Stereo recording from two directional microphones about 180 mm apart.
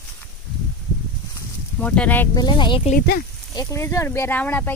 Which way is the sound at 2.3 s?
25° left (ahead or behind).